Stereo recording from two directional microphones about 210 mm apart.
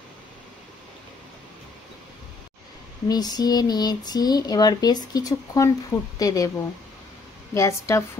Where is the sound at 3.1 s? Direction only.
20° left (ahead or behind).